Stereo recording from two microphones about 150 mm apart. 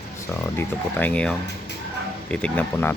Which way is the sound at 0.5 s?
10° left (ahead or behind).